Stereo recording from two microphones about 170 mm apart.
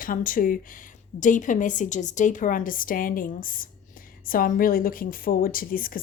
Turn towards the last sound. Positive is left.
turn(degrees=55)  # may be behind; listen again after turning